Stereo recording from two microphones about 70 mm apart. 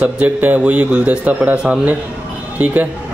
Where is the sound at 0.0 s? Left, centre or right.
Right.